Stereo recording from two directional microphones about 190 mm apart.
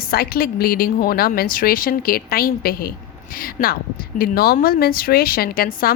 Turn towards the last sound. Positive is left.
turn(degrees=50)  # may be behind; listen again after turning